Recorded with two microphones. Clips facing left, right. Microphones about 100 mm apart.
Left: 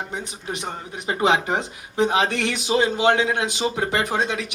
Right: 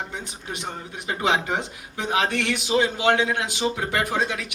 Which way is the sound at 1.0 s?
20° left (ahead or behind).